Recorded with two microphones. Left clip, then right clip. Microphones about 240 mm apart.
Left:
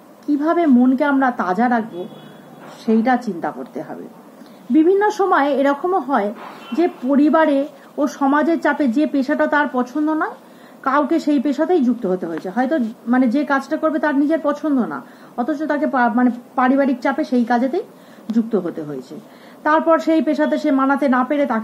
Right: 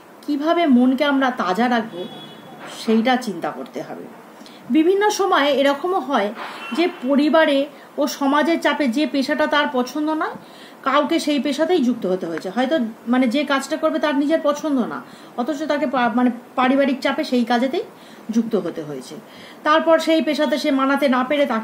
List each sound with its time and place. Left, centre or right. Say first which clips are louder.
0.4 s a woman's voice: left 1 dB; right
19.6 s a woman's voice: even; right